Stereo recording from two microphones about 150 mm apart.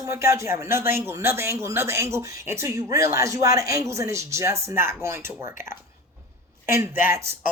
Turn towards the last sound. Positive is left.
turn(degrees=-15)  # may be behind; listen again after turning